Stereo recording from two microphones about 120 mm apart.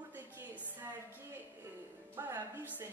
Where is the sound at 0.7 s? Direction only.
15° right (ahead or behind).